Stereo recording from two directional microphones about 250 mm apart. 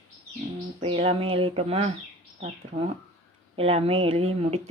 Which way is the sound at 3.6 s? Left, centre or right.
Right.